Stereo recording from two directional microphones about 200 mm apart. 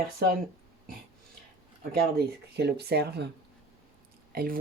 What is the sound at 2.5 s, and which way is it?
Speech, 55° right (ahead or behind).